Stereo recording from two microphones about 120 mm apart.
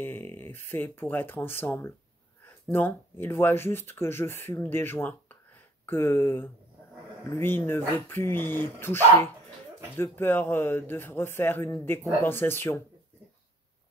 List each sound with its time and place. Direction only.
0.0 s speech: 20° left (ahead or behind)